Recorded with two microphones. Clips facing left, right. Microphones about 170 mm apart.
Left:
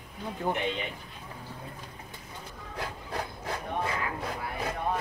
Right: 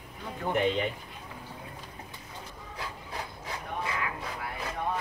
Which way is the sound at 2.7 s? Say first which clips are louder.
Left 4 dB; 55° left (ahead or behind).